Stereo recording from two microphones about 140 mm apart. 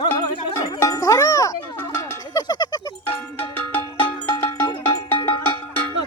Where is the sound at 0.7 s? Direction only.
20° left (ahead or behind).